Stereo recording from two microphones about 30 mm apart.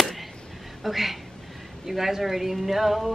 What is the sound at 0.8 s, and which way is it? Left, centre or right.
A woman's voice, centre.